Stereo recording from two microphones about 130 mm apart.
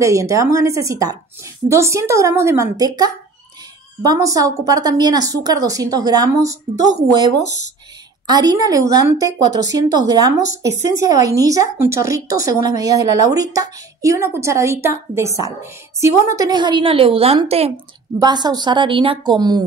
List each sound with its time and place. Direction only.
0.0 s a woman's voice: 25° right (ahead or behind); by 17.7 s 50° right (ahead or behind)
18.2 s a woman's voice: 30° right (ahead or behind)